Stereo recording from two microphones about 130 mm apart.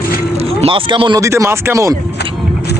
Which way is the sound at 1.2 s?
20° right (ahead or behind).